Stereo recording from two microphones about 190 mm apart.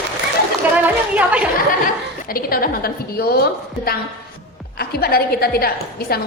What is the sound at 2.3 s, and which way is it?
A woman's voice, 50° left (ahead or behind).